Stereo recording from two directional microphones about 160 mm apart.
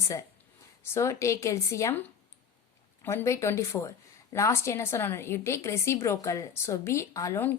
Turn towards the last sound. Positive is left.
turn(degrees=15)  # may be behind; listen again after turning